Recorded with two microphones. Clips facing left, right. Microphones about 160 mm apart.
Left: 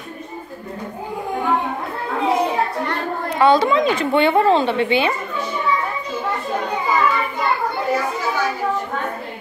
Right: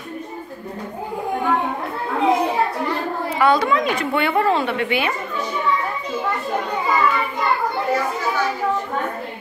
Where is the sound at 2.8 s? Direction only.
5° right (ahead or behind).